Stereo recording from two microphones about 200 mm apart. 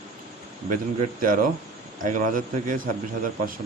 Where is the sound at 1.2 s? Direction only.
45° right (ahead or behind).